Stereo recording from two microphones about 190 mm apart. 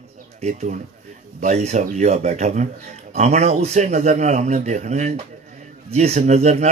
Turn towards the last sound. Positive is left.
turn(degrees=-35)  # may be behind; listen again after turning